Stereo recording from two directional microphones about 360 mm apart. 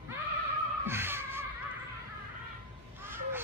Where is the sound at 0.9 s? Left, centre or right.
Centre.